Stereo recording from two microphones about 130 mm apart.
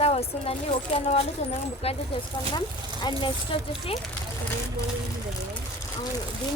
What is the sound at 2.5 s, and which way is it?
Speech, 35° left (ahead or behind).